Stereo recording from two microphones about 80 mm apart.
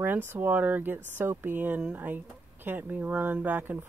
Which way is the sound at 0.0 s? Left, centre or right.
Right.